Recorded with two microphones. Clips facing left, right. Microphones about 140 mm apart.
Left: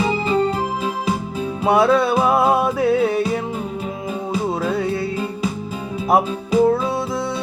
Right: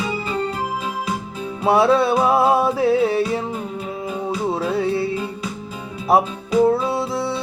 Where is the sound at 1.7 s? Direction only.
30° right (ahead or behind).